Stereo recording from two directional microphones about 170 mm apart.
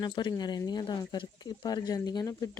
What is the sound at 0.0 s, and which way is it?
Speech, 25° left (ahead or behind).